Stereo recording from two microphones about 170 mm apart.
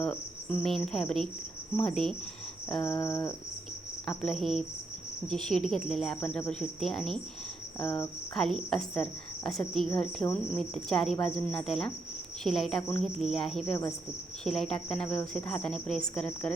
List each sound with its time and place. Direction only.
0.0 s speech: 5° left (ahead or behind)
2.6 s cricket: centre (ahead or behind)
3.0 s speech: 5° left (ahead or behind)